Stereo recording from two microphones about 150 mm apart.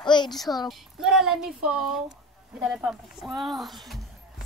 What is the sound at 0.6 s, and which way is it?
Speech, 5° right (ahead or behind).